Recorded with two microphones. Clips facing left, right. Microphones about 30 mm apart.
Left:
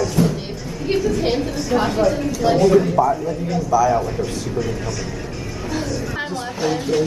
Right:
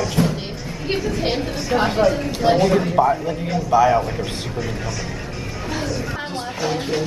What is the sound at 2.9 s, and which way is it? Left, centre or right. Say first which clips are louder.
A man's voice: even; right.